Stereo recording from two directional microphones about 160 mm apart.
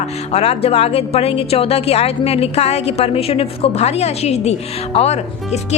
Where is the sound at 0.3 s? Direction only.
40° left (ahead or behind).